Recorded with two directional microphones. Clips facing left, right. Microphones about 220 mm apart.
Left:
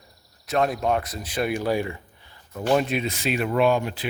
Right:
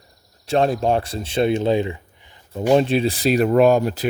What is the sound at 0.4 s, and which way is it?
Speech, 30° right (ahead or behind).